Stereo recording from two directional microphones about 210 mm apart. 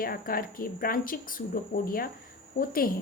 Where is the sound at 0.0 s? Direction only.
45° left (ahead or behind).